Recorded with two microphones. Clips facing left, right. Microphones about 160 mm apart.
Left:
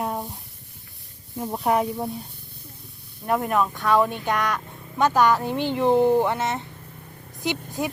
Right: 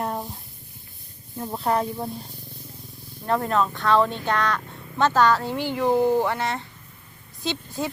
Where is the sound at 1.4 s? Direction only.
15° left (ahead or behind).